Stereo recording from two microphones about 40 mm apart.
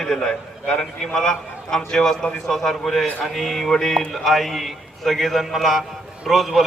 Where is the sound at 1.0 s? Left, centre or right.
Centre.